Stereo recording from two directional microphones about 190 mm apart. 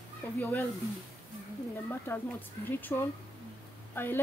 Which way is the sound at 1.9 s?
10° left (ahead or behind).